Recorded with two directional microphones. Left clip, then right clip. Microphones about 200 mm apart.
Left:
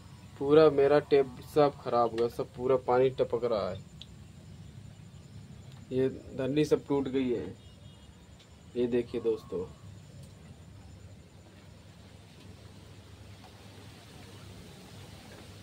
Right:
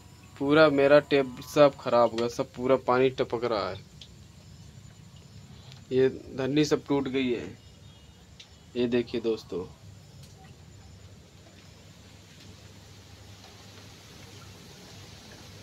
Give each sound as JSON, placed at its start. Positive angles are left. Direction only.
{"t": 0.5, "sound": "speech", "side_deg": -20}
{"t": 5.9, "sound": "speech", "side_deg": -20}
{"t": 8.7, "sound": "speech", "side_deg": -25}